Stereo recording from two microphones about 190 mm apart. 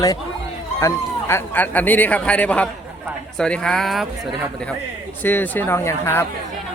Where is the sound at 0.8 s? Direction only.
15° left (ahead or behind).